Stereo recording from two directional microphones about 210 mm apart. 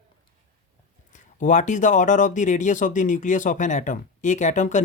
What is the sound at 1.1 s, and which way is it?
Speech, 35° left (ahead or behind).